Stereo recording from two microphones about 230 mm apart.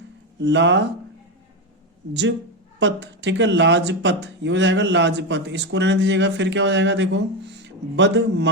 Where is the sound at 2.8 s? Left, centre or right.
Right.